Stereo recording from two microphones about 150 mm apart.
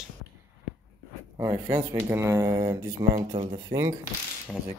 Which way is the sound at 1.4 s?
25° right (ahead or behind).